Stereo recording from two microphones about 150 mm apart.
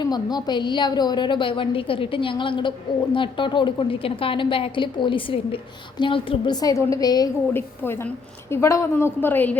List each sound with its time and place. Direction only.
0.0 s a woman's voice: 25° left (ahead or behind)
7.5 s a woman's voice: 15° left (ahead or behind)